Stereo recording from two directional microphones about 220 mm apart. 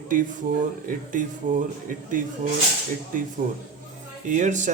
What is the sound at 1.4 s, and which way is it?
Speech, 35° right (ahead or behind).